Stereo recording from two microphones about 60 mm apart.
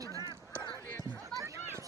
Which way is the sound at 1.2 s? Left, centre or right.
Right.